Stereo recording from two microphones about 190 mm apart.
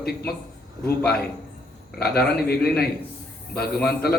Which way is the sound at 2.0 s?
55° left (ahead or behind).